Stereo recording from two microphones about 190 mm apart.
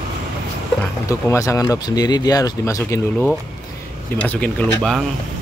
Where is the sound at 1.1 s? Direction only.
15° left (ahead or behind).